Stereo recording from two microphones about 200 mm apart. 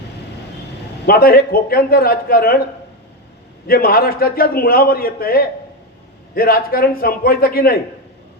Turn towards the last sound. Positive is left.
turn(degrees=45)  # may be behind; listen again after turning